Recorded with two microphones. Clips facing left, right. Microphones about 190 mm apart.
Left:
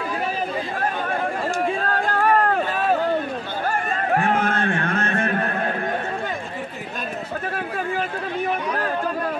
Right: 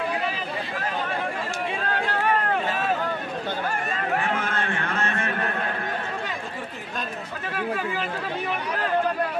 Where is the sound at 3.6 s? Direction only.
50° left (ahead or behind).